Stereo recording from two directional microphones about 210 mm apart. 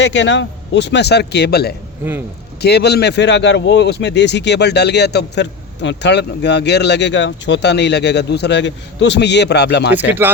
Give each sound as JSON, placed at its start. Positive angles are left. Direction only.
{"t": 0.0, "sound": "a man's voice", "side_deg": 60}
{"t": 10.1, "sound": "speech", "side_deg": -10}